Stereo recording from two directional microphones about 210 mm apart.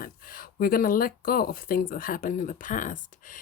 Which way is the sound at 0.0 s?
45° left (ahead or behind).